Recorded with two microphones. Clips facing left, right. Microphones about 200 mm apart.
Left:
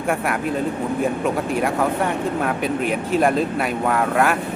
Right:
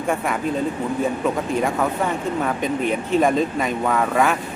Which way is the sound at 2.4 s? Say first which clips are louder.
Even; 5° left (ahead or behind).